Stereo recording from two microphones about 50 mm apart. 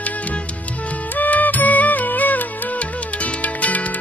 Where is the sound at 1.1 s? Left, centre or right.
Left.